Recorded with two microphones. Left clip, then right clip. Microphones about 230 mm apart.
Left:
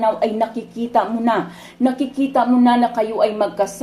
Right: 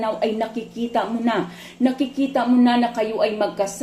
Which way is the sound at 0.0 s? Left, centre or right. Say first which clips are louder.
Left 5 dB; centre.